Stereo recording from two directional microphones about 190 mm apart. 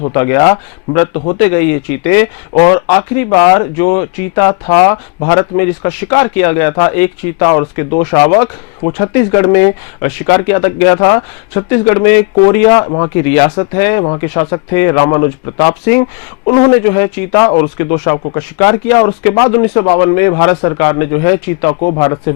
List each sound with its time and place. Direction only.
0.1 s speech: 20° left (ahead or behind)
21.8 s speech: 30° left (ahead or behind)